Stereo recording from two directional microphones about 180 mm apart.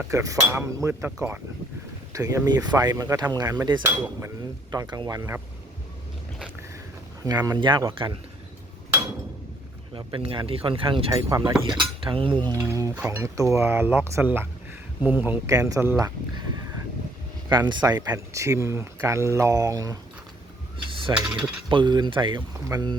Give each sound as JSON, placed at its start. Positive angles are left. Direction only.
{"t": 0.1, "sound": "a sound", "side_deg": -20}
{"t": 2.1, "sound": "speech", "side_deg": -15}
{"t": 7.3, "sound": "speech", "side_deg": -20}
{"t": 9.9, "sound": "speech", "side_deg": -30}
{"t": 11.3, "sound": "a sound", "side_deg": -15}
{"t": 11.6, "sound": "speech", "side_deg": -25}
{"t": 12.5, "sound": "a sound", "side_deg": -15}
{"t": 17.7, "sound": "speech", "side_deg": -25}
{"t": 20.9, "sound": "mechanisms", "side_deg": -30}
{"t": 21.7, "sound": "speech", "side_deg": -25}